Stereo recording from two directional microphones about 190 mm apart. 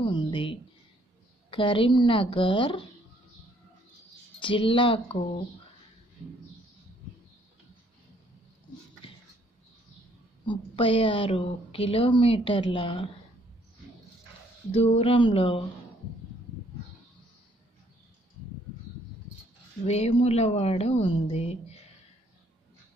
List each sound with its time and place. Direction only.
0.0 s a sound: 25° left (ahead or behind)
1.5 s a woman's voice: 25° left (ahead or behind)
4.4 s a woman's voice: 25° left (ahead or behind)
10.4 s a woman's voice: 25° left (ahead or behind)
14.7 s a woman's voice: 30° left (ahead or behind)
19.9 s speech: 30° left (ahead or behind)